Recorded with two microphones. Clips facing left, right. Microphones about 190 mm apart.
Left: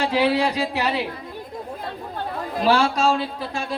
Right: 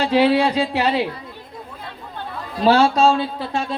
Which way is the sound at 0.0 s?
25° right (ahead or behind).